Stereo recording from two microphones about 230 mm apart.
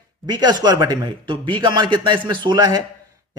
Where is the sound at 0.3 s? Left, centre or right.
Centre.